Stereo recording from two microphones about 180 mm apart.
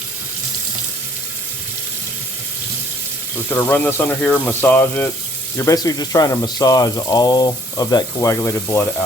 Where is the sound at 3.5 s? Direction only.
10° left (ahead or behind).